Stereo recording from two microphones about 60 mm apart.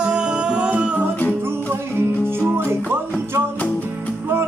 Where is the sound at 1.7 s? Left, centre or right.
Right.